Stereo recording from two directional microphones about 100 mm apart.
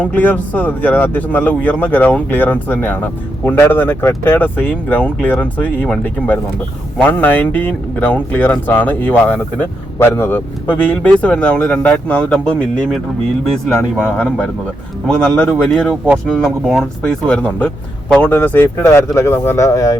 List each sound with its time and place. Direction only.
0.0 s speech: 15° left (ahead or behind)
14.2 s speech: 10° left (ahead or behind)
17.0 s speech: 10° left (ahead or behind); by 20.0 s 35° left (ahead or behind)